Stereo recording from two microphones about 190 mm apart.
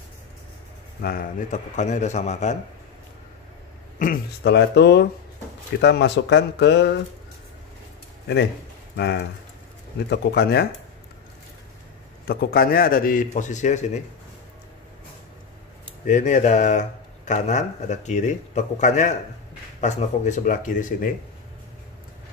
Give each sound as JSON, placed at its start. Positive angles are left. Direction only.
{"t": 1.0, "sound": "speech", "side_deg": 50}
{"t": 4.0, "sound": "speech", "side_deg": 55}
{"t": 8.9, "sound": "speech", "side_deg": 65}
{"t": 12.3, "sound": "a man's voice", "side_deg": 50}
{"t": 16.1, "sound": "a man's voice", "side_deg": 40}